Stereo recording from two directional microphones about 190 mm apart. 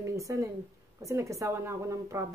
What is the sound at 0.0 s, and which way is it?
Speech, 15° right (ahead or behind).